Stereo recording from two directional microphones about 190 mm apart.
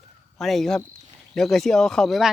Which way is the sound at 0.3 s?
Centre (ahead or behind).